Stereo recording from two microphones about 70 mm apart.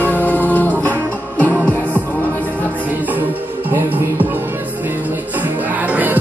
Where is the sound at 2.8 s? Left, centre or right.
Right.